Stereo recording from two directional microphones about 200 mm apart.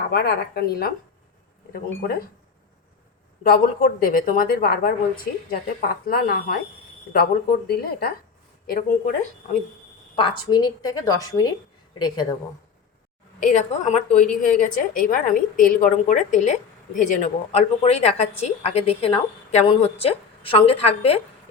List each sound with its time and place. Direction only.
0.1 s a woman's voice: 50° left (ahead or behind)
3.4 s a woman's voice: 45° left (ahead or behind)
10.4 s a woman's voice: 20° left (ahead or behind)
13.4 s a woman's voice: 35° left (ahead or behind)